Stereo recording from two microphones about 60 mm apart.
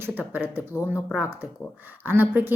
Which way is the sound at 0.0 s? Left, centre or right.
Right.